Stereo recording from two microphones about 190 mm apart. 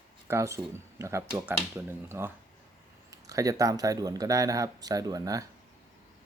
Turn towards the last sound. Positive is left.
turn(degrees=-20)  # may be behind; listen again after turning